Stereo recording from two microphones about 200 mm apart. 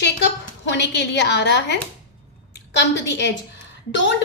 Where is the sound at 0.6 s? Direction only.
60° left (ahead or behind).